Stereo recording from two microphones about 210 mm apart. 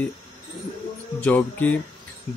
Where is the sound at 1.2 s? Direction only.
10° left (ahead or behind).